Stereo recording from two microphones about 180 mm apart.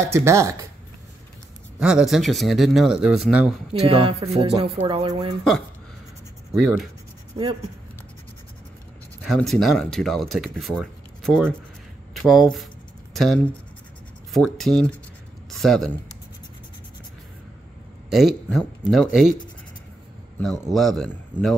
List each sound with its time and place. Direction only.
0.0 s speech: 15° right (ahead or behind)
1.8 s speech: 5° right (ahead or behind)
3.8 s speech: 30° right (ahead or behind)
6.5 s speech: 5° right (ahead or behind)
9.2 s speech: centre (ahead or behind)
18.1 s speech: centre (ahead or behind)
20.7 s speech: centre (ahead or behind)